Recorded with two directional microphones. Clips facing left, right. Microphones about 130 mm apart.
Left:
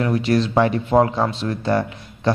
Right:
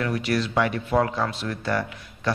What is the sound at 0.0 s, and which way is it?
Speech, 25° left (ahead or behind).